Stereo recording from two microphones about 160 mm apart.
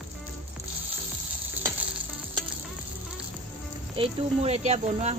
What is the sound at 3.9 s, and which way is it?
Speech, 40° right (ahead or behind).